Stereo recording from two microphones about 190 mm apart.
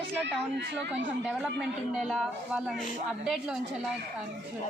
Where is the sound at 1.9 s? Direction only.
Centre (ahead or behind).